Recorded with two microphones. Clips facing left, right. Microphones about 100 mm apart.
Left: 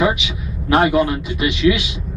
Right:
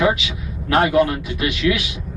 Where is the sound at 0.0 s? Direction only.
20° left (ahead or behind).